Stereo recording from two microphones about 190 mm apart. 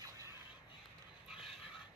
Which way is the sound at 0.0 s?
15° right (ahead or behind).